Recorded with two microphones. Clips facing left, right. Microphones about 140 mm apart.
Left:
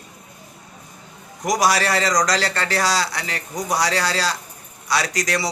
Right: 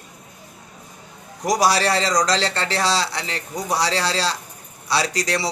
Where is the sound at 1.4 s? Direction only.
30° right (ahead or behind).